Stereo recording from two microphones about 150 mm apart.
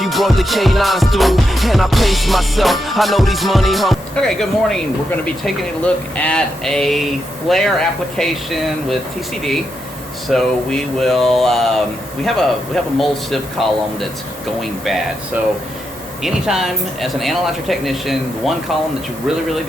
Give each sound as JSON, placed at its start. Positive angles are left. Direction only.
{"t": 0.0, "sound": "music", "side_deg": 0}
{"t": 5.8, "sound": "music", "side_deg": 10}
{"t": 10.2, "sound": "music", "side_deg": 5}
{"t": 16.2, "sound": "music", "side_deg": 0}